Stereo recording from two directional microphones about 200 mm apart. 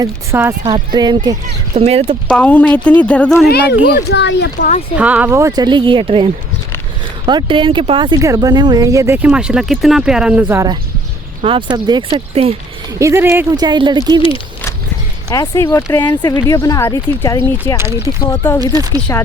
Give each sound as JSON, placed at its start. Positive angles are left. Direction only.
{"t": 0.0, "sound": "speech", "side_deg": -10}
{"t": 1.7, "sound": "speech", "side_deg": -30}
{"t": 2.3, "sound": "speech", "side_deg": 5}
{"t": 3.4, "sound": "speech", "side_deg": 55}
{"t": 4.9, "sound": "speech", "side_deg": -5}
{"t": 11.4, "sound": "speech", "side_deg": -25}
{"t": 13.0, "sound": "speech", "side_deg": -15}
{"t": 15.3, "sound": "speech", "side_deg": 15}
{"t": 17.7, "sound": "speech", "side_deg": -15}
{"t": 18.3, "sound": "speech", "side_deg": 10}
{"t": 18.6, "sound": "speech", "side_deg": -20}